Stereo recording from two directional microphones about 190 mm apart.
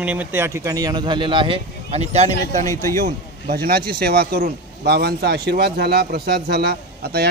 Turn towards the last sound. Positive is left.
turn(degrees=-55)  # may be behind; listen again after turning